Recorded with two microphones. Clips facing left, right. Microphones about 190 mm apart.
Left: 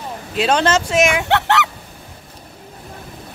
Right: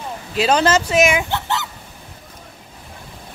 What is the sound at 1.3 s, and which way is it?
Honk, 70° left (ahead or behind).